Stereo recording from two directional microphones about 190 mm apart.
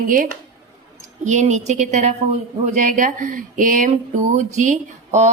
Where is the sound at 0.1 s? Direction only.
45° right (ahead or behind).